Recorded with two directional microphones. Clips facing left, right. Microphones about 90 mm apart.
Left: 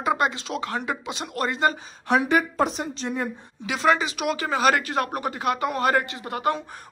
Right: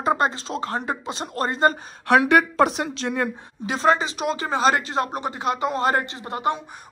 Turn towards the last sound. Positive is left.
turn(degrees=-25)  # may be behind; listen again after turning